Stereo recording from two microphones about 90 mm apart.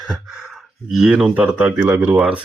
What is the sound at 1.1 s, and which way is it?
Speech, 15° right (ahead or behind).